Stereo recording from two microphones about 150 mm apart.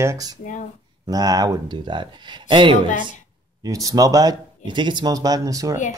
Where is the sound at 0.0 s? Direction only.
20° right (ahead or behind).